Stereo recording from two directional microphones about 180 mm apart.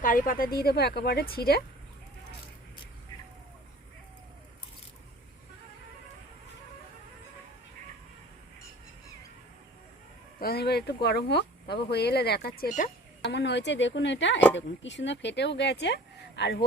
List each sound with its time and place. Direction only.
0.0 s speech: 50° left (ahead or behind)
10.4 s speech: 60° left (ahead or behind); by 12.9 s 45° left (ahead or behind)
13.3 s speech: 75° left (ahead or behind)